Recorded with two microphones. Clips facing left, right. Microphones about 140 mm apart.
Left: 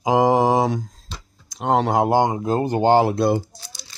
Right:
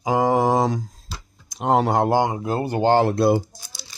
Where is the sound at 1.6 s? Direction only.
Centre (ahead or behind).